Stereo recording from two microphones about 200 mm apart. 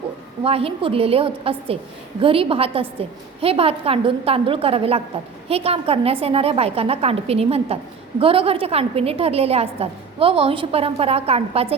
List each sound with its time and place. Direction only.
0.4 s a woman's voice: 30° right (ahead or behind)